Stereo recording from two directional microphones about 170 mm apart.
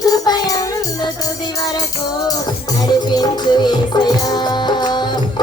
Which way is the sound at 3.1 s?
25° left (ahead or behind).